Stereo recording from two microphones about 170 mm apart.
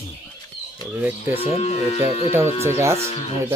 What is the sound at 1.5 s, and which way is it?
Speech, 35° left (ahead or behind).